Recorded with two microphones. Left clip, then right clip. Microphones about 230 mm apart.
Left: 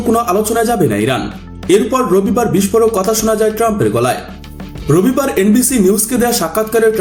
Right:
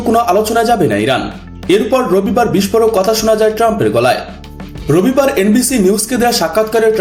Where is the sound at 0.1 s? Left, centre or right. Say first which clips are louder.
Right 2 dB; centre.